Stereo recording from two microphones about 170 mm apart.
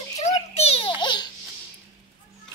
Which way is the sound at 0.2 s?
35° left (ahead or behind).